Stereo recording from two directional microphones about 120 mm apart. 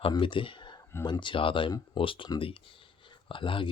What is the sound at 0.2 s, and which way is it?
Speech, 45° left (ahead or behind).